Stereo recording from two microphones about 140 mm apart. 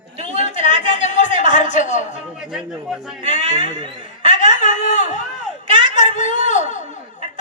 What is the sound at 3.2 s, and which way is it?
Speech, 60° left (ahead or behind).